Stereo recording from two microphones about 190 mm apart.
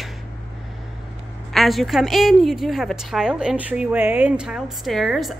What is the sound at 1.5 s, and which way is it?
A woman's voice, centre (ahead or behind).